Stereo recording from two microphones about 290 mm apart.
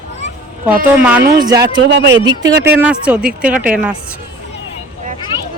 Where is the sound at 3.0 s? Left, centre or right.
Centre.